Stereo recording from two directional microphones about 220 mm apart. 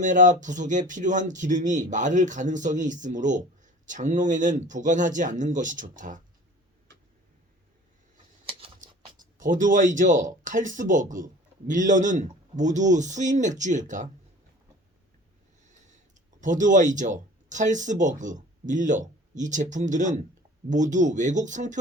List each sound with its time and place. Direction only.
0.0 s speech: 35° right (ahead or behind)
8.4 s a sound: 25° right (ahead or behind)
9.4 s speech: 35° right (ahead or behind)
16.4 s speech: 35° right (ahead or behind)